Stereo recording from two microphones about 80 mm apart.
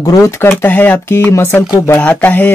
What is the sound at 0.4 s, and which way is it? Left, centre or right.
Speech, left.